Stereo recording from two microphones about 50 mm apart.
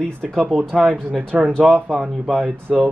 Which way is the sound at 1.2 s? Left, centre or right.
Right.